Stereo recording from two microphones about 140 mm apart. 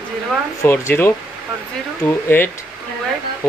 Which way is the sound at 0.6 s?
15° left (ahead or behind).